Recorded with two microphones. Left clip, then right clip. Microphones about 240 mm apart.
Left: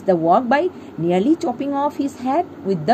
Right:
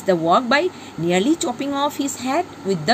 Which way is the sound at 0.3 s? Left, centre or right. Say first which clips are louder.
Even; centre.